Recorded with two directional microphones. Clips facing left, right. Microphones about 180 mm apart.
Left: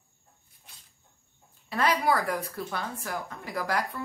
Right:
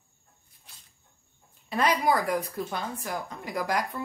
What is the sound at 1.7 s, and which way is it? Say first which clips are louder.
A woman's voice: right 1 dB; 15° right (ahead or behind).